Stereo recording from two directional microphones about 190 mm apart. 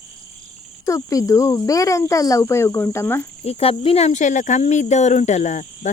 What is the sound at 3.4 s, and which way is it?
Speech, 30° left (ahead or behind).